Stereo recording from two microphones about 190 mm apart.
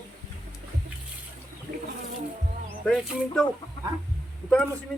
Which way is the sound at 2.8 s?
Centre (ahead or behind).